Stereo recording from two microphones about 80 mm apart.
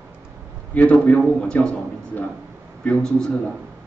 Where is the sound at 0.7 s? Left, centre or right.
Centre.